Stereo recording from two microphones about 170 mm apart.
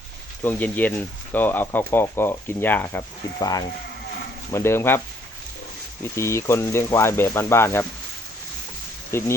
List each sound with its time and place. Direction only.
0.4 s speech: 10° left (ahead or behind)
4.5 s speech: 15° left (ahead or behind)
6.0 s speech: 15° left (ahead or behind)
9.1 s speech: 15° left (ahead or behind)